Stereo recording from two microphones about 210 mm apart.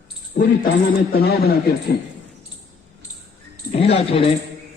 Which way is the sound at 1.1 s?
50° left (ahead or behind).